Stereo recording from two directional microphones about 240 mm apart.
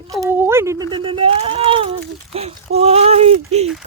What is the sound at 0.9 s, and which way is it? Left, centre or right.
Speech, right.